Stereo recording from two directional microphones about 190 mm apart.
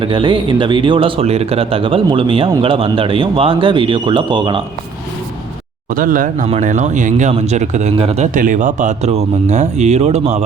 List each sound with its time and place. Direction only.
0.0 s speech: 25° right (ahead or behind)
5.9 s speech: 45° right (ahead or behind)